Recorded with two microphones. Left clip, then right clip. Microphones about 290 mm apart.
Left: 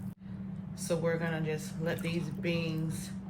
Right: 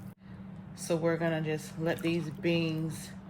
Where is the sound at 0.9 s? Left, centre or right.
Right.